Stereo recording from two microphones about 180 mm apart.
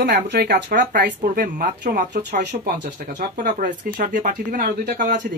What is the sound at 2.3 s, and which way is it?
Speech, 70° right (ahead or behind).